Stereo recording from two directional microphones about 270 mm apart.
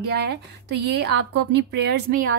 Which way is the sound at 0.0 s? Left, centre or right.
Right.